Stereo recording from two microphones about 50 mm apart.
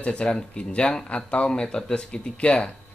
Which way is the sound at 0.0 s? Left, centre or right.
Left.